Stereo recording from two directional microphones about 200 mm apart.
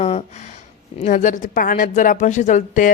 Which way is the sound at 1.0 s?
40° left (ahead or behind).